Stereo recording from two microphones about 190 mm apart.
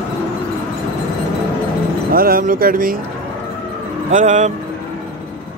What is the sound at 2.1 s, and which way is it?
Speech, 50° right (ahead or behind).